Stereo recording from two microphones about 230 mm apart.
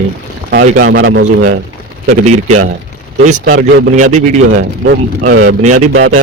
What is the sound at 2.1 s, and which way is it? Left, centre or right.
Speech, right.